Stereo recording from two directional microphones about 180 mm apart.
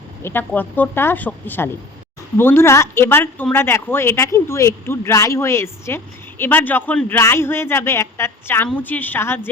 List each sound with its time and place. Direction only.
0.2 s speech: 10° left (ahead or behind)